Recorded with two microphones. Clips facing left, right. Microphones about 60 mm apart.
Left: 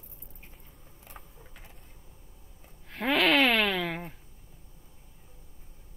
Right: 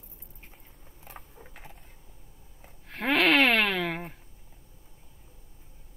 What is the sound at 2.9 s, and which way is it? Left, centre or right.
Wail, centre.